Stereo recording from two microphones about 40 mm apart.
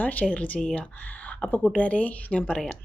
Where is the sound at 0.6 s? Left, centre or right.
Centre.